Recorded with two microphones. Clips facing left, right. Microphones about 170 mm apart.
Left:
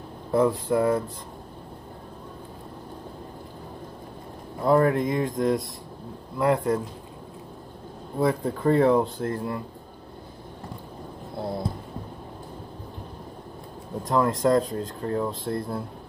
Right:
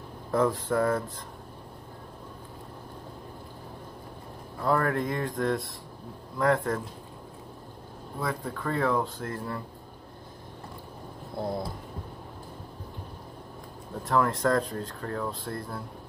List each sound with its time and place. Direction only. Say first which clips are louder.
0.3 s speech: left 4 dB; 10° left (ahead or behind)
4.6 s speech: left 6 dB; 20° left (ahead or behind)
8.2 s speech: left 9 dB; 30° left (ahead or behind)
14.0 s speech: left 3 dB; 20° left (ahead or behind)